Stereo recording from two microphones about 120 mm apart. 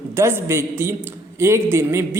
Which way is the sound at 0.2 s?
20° right (ahead or behind).